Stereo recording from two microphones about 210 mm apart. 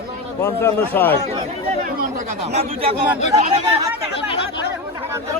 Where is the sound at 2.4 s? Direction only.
30° right (ahead or behind).